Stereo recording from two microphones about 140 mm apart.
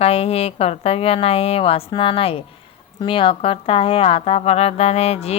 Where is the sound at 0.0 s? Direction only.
45° left (ahead or behind).